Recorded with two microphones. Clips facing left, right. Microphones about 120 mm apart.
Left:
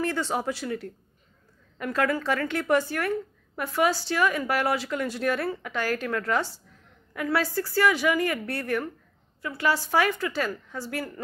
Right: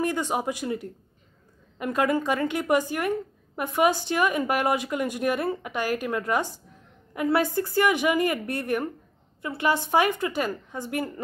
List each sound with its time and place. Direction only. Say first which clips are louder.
0.0 s a woman's voice: right 1 dB; 15° right (ahead or behind)